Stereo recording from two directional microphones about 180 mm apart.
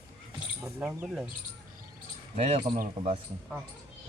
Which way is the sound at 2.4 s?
35° right (ahead or behind).